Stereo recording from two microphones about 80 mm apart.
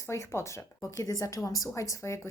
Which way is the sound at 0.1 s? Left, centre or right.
Left.